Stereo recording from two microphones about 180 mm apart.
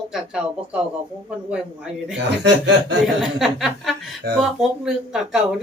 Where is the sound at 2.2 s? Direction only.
75° right (ahead or behind).